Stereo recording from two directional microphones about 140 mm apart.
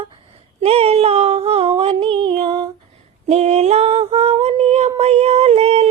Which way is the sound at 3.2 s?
50° right (ahead or behind).